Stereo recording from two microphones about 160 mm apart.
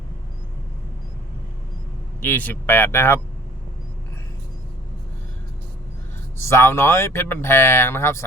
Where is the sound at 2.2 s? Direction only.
10° left (ahead or behind).